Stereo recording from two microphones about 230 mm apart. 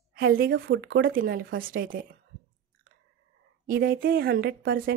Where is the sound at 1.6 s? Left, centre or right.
Right.